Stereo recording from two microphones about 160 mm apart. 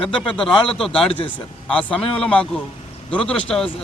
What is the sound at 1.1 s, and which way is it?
Speech, 30° left (ahead or behind).